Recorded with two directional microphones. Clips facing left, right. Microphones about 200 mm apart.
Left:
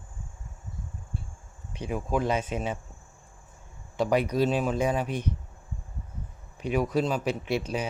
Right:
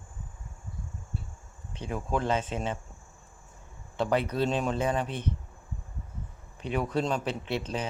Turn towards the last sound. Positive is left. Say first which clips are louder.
# left 3 dB
turn(degrees=10)  # may be behind; listen again after turning